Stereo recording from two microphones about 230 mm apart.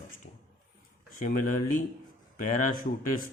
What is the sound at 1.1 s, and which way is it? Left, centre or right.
Speech, left.